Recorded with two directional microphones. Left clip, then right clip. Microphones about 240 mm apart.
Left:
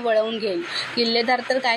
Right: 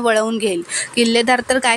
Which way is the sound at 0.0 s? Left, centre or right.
Right.